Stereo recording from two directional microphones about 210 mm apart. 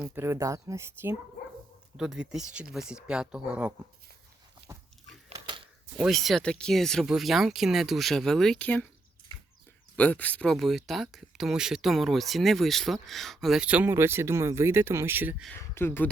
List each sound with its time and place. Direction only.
0.0 s speech: 10° right (ahead or behind)
2.0 s speech: 5° right (ahead or behind)
5.3 s a sound: 20° right (ahead or behind)
6.0 s speech: centre (ahead or behind)
9.9 s speech: 5° left (ahead or behind); by 15.4 s 10° right (ahead or behind)
15.4 s speech: 10° left (ahead or behind)